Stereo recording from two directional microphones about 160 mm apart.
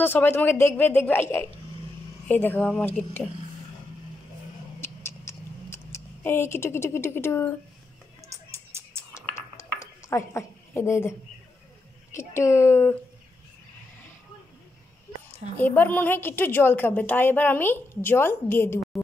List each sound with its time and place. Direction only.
0.0 s a woman's voice: 15° left (ahead or behind)
4.7 s scissors: 15° left (ahead or behind)
8.3 s a sound: 15° right (ahead or behind)
9.3 s dishes: 20° left (ahead or behind)
12.1 s a woman's voice: 15° left (ahead or behind)
15.5 s a woman's voice: 10° left (ahead or behind)